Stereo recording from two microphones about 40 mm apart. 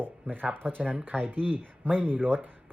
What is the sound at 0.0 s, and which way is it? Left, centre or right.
Speech, right.